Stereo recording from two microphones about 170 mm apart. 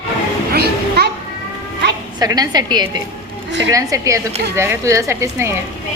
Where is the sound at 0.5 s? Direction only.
70° right (ahead or behind).